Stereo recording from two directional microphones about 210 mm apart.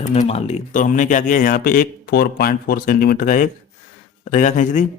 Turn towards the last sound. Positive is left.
turn(degrees=35)  # may be behind; listen again after turning